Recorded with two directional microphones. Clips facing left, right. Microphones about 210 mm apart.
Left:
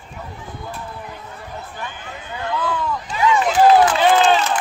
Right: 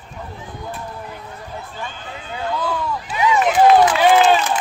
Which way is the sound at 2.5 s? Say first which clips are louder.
Left 1 dB; 10° right (ahead or behind).